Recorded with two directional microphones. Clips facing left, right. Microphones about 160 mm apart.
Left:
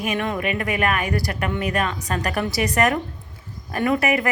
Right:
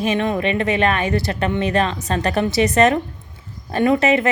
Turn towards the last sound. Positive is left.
turn(degrees=-25)  # may be behind; listen again after turning